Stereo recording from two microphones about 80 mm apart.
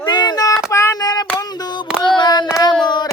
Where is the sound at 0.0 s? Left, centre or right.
Left.